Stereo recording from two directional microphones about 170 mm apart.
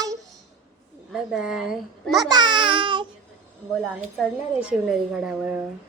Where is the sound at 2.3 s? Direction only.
25° right (ahead or behind).